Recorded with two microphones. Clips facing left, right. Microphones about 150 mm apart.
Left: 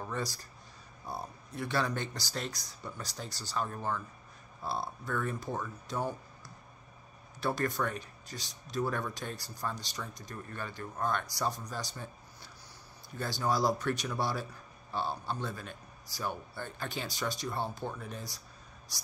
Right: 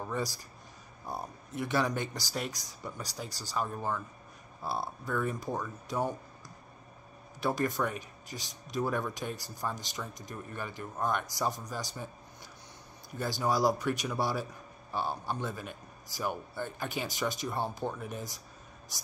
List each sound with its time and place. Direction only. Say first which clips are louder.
0.0 s speech: right 2 dB; 10° right (ahead or behind)
7.3 s speech: right 2 dB; 15° right (ahead or behind)
13.2 s speech: right 2 dB; 15° right (ahead or behind)